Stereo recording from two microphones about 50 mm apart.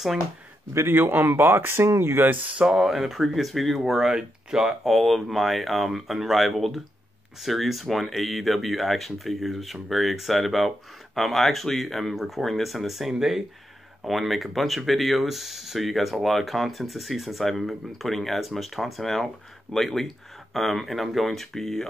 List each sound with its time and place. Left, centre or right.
0.7 s speech: right
1.9 s chopping: right
2.5 s speech: centre